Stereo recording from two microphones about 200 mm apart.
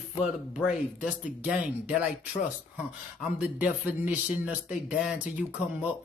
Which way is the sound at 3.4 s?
5° right (ahead or behind).